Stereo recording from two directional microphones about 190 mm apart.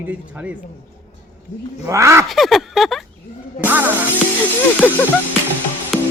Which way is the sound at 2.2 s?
Centre (ahead or behind).